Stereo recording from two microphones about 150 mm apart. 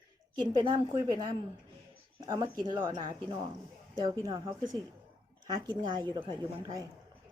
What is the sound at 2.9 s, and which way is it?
A woman's voice, 30° right (ahead or behind).